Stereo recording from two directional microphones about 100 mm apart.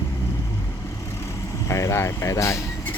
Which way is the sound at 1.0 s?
25° left (ahead or behind).